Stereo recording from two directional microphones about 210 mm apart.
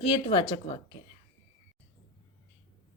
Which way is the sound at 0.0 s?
25° left (ahead or behind).